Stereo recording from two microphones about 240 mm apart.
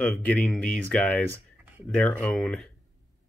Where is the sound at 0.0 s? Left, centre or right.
Centre.